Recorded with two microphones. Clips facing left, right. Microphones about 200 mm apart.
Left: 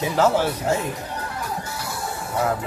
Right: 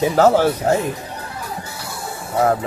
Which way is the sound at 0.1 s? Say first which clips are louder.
Right 4 dB; 40° right (ahead or behind).